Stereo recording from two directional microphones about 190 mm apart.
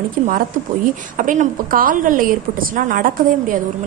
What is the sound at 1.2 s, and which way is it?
Speech, 45° right (ahead or behind).